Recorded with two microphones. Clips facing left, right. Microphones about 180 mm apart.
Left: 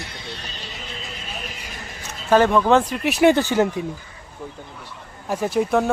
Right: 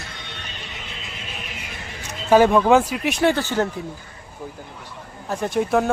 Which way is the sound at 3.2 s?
15° left (ahead or behind).